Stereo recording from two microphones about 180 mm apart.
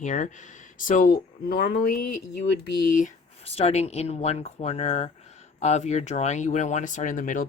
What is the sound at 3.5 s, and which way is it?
Speech, 35° left (ahead or behind).